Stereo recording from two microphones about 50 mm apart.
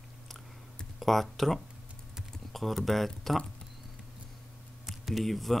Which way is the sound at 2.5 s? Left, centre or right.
Centre.